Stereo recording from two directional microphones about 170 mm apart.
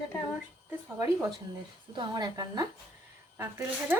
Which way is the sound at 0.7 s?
15° right (ahead or behind).